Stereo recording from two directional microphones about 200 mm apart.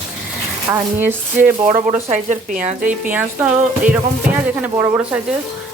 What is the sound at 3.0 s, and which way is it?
Speech, 10° right (ahead or behind).